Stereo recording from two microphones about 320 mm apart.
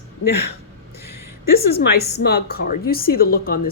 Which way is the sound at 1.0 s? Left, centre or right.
Left.